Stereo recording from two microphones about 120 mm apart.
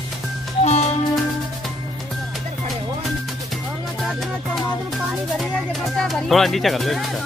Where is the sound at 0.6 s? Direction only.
65° left (ahead or behind).